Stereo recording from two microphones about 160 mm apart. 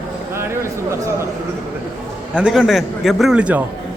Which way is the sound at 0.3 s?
15° right (ahead or behind).